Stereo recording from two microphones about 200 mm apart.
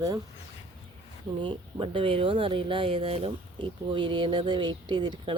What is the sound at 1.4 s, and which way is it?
Speech, 25° right (ahead or behind).